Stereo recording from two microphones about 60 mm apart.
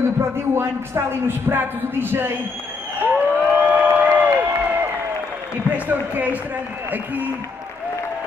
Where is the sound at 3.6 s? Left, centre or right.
Right.